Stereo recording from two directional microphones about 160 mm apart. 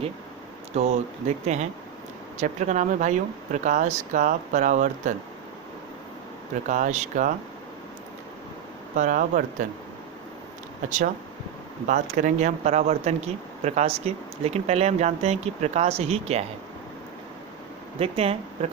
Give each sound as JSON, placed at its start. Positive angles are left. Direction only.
{"t": 0.7, "sound": "speech", "side_deg": -40}
{"t": 2.4, "sound": "speech", "side_deg": -50}
{"t": 6.7, "sound": "speech", "side_deg": -50}
{"t": 9.0, "sound": "speech", "side_deg": -55}
{"t": 10.8, "sound": "speech", "side_deg": -50}
{"t": 18.0, "sound": "speech", "side_deg": -40}